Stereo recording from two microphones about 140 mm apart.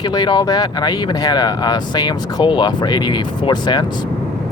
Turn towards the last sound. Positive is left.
turn(degrees=30)  # may be behind; listen again after turning